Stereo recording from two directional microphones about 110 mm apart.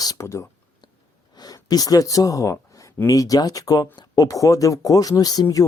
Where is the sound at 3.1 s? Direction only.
30° left (ahead or behind).